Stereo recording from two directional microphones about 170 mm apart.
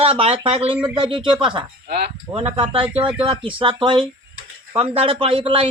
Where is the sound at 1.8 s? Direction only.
75° right (ahead or behind).